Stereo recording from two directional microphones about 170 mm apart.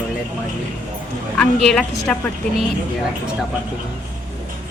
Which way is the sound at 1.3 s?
5° left (ahead or behind).